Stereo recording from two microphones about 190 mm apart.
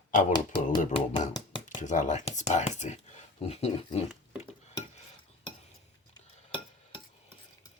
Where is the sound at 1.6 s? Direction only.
40° left (ahead or behind).